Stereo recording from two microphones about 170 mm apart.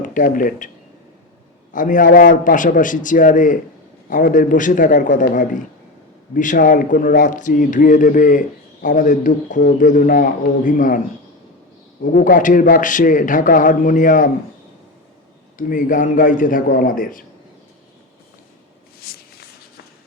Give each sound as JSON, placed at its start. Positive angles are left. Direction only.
{"t": 0.0, "sound": "speech", "side_deg": 50}
{"t": 1.7, "sound": "speech", "side_deg": 50}
{"t": 12.1, "sound": "speech", "side_deg": 50}
{"t": 15.5, "sound": "speech", "side_deg": 50}
{"t": 18.9, "sound": "walk", "side_deg": 60}